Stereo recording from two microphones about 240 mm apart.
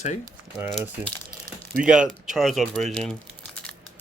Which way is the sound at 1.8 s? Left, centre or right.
Centre.